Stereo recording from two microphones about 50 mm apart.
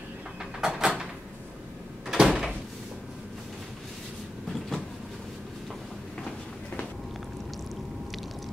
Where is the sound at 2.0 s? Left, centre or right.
Centre.